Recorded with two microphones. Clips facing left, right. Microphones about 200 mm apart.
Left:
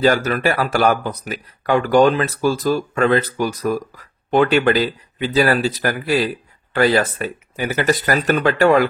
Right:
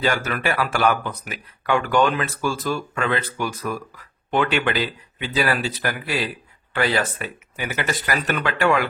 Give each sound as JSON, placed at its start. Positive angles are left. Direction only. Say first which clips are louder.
{"t": 0.0, "sound": "speech", "louder": "left 7 dB", "side_deg": 35}